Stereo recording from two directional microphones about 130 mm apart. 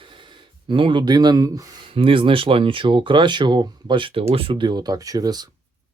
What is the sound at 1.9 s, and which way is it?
Speech, 45° right (ahead or behind).